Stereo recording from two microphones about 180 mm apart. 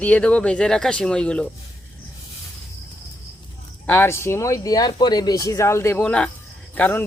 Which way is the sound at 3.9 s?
15° left (ahead or behind).